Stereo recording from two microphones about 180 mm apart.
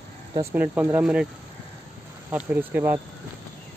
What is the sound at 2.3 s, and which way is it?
Speech, 10° right (ahead or behind).